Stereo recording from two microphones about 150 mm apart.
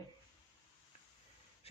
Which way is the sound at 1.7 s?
40° left (ahead or behind).